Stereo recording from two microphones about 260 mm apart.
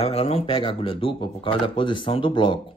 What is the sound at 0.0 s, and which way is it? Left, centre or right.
Speech, left.